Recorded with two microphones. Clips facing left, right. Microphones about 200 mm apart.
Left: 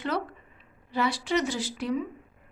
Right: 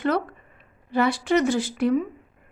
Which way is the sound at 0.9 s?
55° right (ahead or behind).